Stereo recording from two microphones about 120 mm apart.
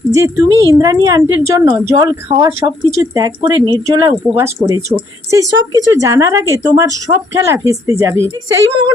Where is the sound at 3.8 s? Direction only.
25° right (ahead or behind).